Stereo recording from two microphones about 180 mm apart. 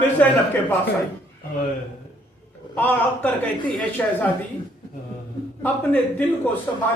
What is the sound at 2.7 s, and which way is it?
A man's voice, 10° left (ahead or behind).